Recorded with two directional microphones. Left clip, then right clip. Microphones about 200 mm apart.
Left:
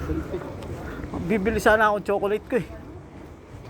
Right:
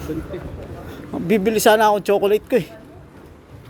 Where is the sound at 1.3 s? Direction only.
45° right (ahead or behind).